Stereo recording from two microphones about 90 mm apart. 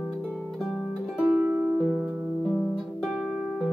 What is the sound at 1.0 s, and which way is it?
Music, 10° right (ahead or behind).